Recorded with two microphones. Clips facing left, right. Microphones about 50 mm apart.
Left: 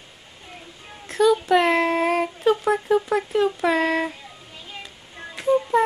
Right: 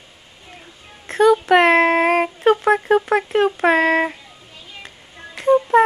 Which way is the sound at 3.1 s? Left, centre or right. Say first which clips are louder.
Right 4 dB; right.